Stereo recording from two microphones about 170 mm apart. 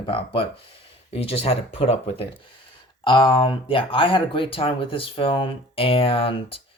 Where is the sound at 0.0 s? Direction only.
30° left (ahead or behind).